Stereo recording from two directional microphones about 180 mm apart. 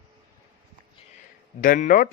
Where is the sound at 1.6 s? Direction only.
50° left (ahead or behind).